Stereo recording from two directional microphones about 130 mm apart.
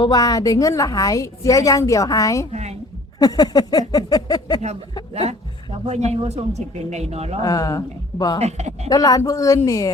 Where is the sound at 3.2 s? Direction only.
30° left (ahead or behind).